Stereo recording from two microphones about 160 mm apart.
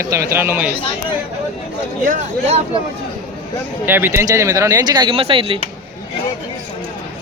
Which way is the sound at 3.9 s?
15° right (ahead or behind).